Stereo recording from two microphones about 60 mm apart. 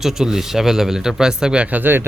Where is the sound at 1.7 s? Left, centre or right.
Right.